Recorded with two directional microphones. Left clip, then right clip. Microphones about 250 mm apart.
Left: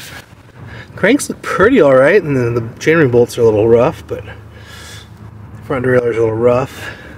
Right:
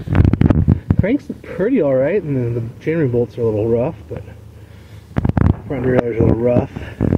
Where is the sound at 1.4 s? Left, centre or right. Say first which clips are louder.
Left 9 dB; left.